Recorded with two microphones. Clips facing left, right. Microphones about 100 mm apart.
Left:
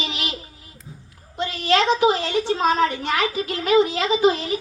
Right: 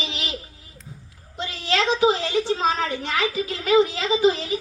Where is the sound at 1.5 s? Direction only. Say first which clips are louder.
Left 4 dB; 55° left (ahead or behind).